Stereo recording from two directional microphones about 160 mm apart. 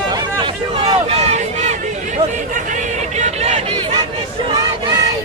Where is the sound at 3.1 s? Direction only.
45° right (ahead or behind).